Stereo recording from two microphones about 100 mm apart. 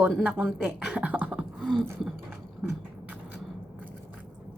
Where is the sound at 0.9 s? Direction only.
15° right (ahead or behind).